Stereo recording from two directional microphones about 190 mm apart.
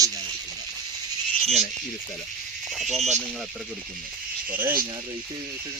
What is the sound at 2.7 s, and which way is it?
Speech, centre (ahead or behind).